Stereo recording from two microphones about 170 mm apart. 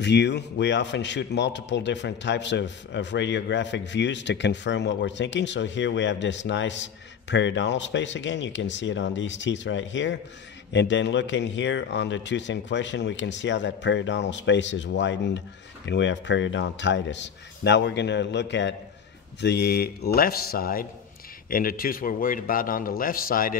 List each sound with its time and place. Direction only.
0.0 s a man's voice: 90° left
19.4 s a man's voice: 75° left (ahead or behind); by 23.6 s 55° left (ahead or behind)